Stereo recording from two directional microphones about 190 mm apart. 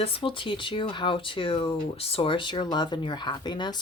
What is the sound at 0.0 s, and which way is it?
Speech, 30° left (ahead or behind).